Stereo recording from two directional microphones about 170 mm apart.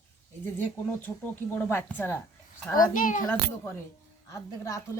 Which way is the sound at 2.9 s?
50° left (ahead or behind).